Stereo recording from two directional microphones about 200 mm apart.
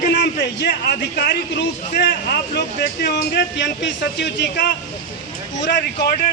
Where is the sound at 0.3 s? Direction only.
55° left (ahead or behind).